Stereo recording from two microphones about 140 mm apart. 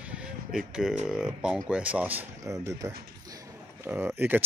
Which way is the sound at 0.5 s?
5° right (ahead or behind).